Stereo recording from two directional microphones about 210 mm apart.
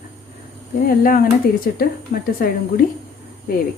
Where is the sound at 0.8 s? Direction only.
40° left (ahead or behind).